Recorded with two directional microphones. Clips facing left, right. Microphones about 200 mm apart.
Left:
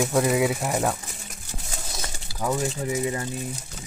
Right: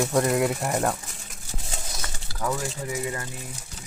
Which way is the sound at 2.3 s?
20° left (ahead or behind).